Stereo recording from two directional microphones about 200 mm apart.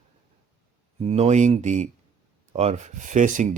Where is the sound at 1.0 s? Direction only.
30° right (ahead or behind).